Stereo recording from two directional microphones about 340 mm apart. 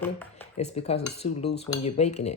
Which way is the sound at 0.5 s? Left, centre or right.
Centre.